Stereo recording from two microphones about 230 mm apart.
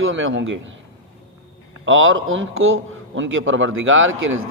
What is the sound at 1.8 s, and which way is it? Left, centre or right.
A man's voice, right.